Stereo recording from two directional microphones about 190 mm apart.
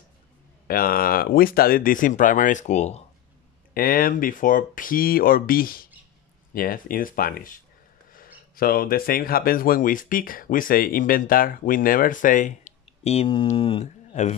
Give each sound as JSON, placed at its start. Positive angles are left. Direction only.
{"t": 0.7, "sound": "speech", "side_deg": 50}
{"t": 3.7, "sound": "speech", "side_deg": 50}